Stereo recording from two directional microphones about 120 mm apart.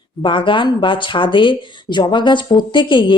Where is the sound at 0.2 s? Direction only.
45° left (ahead or behind).